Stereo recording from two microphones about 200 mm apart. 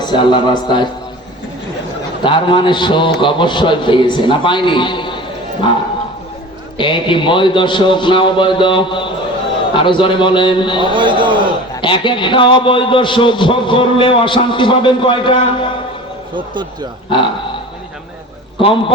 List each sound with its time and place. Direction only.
0.0 s a man's voice: 20° left (ahead or behind)
2.2 s a man's voice: 25° left (ahead or behind)
6.7 s a man's voice: 25° left (ahead or behind)
10.9 s a man's voice: 25° right (ahead or behind)
11.7 s a man's voice: 25° left (ahead or behind)
17.1 s a man's voice: 25° left (ahead or behind)